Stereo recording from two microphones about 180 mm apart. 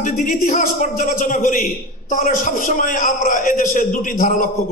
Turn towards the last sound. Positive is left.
turn(degrees=50)  # may be behind; listen again after turning